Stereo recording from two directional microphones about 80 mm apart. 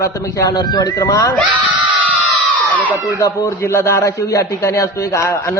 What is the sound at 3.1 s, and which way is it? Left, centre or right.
A man's voice, left.